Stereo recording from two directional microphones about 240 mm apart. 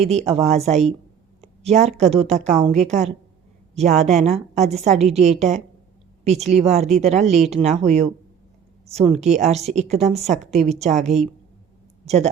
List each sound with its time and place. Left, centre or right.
0.0 s a woman's voice: right
9.2 s a woman's voice: right